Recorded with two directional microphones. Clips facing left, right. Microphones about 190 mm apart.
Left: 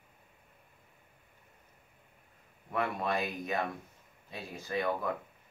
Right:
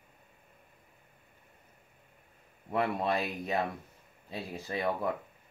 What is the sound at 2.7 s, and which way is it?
Speech, 30° right (ahead or behind).